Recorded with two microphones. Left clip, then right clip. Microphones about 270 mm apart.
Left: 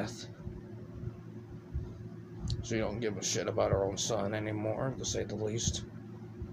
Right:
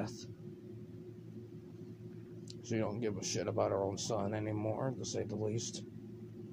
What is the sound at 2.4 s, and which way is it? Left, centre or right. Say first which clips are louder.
Speech: left 3 dB; centre.